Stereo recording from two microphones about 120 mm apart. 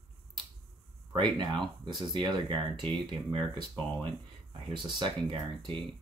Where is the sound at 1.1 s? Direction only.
40° right (ahead or behind).